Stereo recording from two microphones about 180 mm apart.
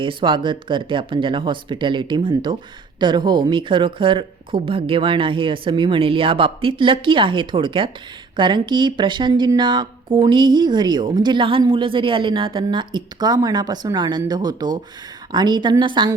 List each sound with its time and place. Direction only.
0.0 s speech: 30° right (ahead or behind)